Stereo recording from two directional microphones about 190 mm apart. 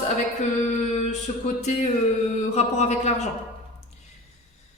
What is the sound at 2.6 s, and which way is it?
Speech, 35° left (ahead or behind).